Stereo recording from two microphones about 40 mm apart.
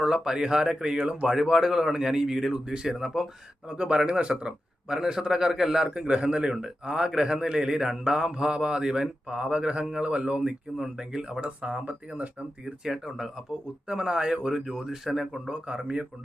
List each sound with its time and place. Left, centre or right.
0.0 s speech: centre
1.4 s speech: centre
3.7 s a man's voice: right
4.9 s a man's voice: centre; by 10.5 s right
10.8 s a man's voice: centre; by 12.7 s right
13.1 s speech: centre
13.8 s a man's voice: right; by 15.4 s centre
15.4 s a man's voice: right